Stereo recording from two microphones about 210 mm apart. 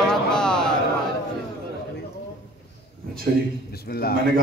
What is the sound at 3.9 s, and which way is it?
Speech, 45° left (ahead or behind).